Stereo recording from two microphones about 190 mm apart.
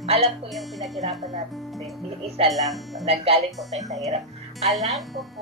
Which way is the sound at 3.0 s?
30° right (ahead or behind).